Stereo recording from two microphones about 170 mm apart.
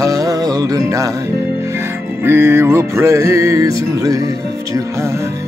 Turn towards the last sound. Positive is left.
turn(degrees=-20)  # may be behind; listen again after turning